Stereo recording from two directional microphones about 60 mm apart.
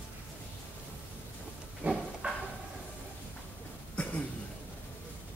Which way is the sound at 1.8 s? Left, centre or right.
Right.